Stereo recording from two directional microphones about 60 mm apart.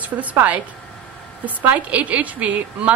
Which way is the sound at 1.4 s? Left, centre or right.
Right.